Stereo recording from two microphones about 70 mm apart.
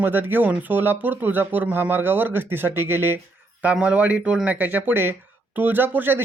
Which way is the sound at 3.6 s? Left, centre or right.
Centre.